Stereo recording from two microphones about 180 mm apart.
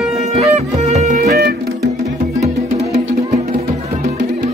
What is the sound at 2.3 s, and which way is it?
Music, 40° right (ahead or behind).